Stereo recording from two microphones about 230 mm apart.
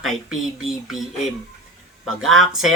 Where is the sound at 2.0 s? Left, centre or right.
Centre.